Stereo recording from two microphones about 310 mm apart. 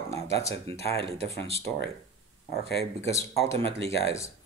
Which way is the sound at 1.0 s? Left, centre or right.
Centre.